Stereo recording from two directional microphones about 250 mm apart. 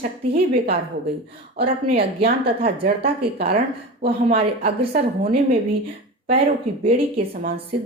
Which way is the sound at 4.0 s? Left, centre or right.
Right.